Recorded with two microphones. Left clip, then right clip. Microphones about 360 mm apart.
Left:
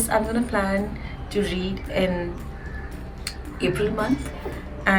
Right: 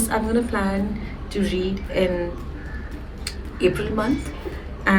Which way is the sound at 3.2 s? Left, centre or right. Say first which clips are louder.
Right 4 dB; centre.